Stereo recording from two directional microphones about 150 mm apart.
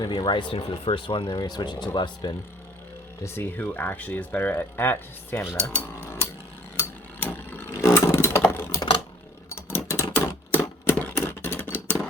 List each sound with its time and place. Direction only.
0.2 s speech: 30° left (ahead or behind)
3.2 s speech: 15° left (ahead or behind)
6.7 s a sound: 15° left (ahead or behind)